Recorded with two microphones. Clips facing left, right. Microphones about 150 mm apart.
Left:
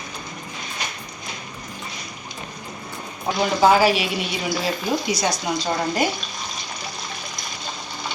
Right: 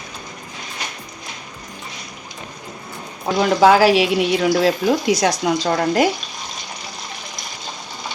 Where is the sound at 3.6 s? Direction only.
90° right; by 4.9 s 70° right (ahead or behind).